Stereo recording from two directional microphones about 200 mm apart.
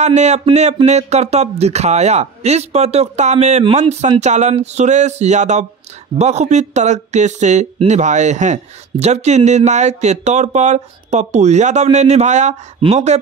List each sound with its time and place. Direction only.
0.0 s speech: 35° right (ahead or behind)